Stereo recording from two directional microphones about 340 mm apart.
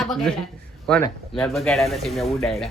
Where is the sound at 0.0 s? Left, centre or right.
Centre.